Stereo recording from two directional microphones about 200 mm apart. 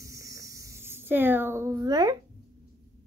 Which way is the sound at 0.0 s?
15° right (ahead or behind).